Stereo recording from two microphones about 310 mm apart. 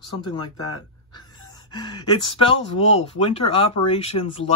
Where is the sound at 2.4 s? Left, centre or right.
Centre.